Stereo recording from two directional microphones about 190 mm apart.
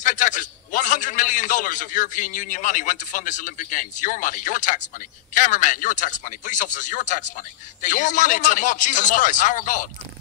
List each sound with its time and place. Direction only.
0.0 s a man's voice: 40° left (ahead or behind)